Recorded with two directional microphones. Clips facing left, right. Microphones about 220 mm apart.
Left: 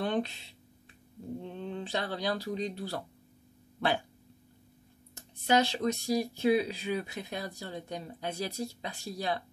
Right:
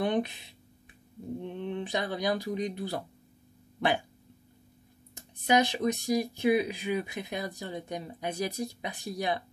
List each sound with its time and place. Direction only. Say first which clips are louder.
0.0 s a sound: right 3 dB; 15° right (ahead or behind)
1.4 s speech: right 5 dB; 15° right (ahead or behind)
5.1 s speech: right 1 dB; 15° right (ahead or behind)